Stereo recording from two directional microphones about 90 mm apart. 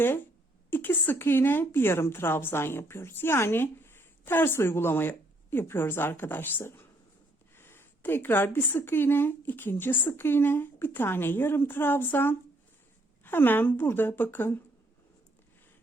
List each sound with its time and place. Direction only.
0.7 s speech: 25° left (ahead or behind)